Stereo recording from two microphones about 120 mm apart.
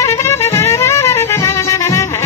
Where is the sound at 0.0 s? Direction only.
25° left (ahead or behind).